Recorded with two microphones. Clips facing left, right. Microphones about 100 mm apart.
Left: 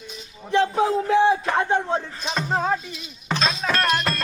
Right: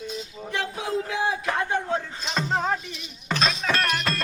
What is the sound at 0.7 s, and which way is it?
Speech, 30° left (ahead or behind).